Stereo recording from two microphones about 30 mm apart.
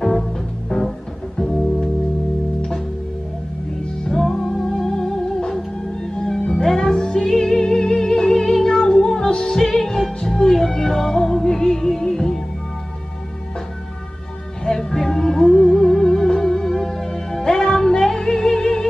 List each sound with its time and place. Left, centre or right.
0.0 s music: centre
4.3 s music: centre
6.5 s music: centre
14.6 s music: left